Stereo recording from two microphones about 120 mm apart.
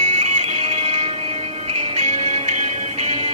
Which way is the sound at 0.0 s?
85° right.